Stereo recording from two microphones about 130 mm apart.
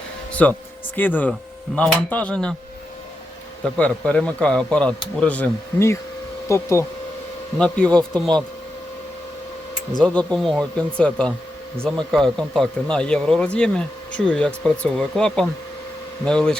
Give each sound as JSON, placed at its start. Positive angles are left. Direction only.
{"t": 0.4, "sound": "a man's voice", "side_deg": 10}
{"t": 3.6, "sound": "a man's voice", "side_deg": 10}
{"t": 7.6, "sound": "a man's voice", "side_deg": 5}
{"t": 10.0, "sound": "a man's voice", "side_deg": 10}